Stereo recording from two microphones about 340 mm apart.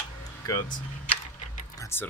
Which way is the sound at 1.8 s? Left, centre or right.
Centre.